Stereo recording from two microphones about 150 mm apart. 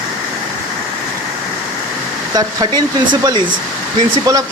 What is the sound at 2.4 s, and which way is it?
Speech, 25° right (ahead or behind).